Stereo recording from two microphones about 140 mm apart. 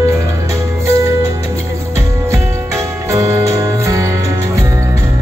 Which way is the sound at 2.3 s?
20° right (ahead or behind).